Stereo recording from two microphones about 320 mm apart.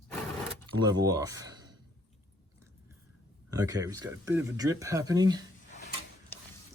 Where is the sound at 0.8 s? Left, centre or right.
Centre.